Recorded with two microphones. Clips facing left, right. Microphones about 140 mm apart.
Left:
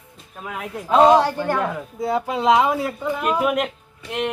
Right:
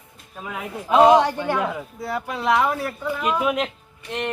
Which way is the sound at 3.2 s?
5° left (ahead or behind).